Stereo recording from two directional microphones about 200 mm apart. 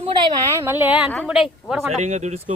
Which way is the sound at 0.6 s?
10° right (ahead or behind).